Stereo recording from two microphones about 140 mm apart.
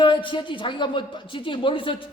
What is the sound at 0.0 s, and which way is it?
Speech, 35° left (ahead or behind).